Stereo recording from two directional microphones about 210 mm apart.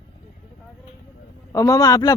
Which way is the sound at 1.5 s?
15° left (ahead or behind).